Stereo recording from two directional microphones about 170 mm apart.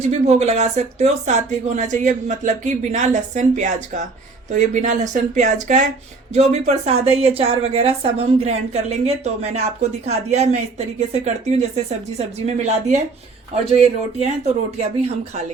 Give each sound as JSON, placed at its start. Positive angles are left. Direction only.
{"t": 0.1, "sound": "a woman's voice", "side_deg": -40}
{"t": 11.9, "sound": "a woman's voice", "side_deg": -40}